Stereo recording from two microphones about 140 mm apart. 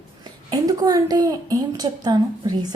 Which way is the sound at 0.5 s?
25° right (ahead or behind).